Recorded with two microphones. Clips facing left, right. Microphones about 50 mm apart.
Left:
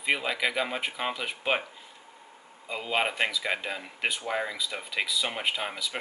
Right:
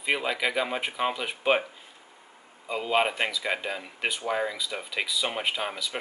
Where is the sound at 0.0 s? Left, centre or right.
Centre.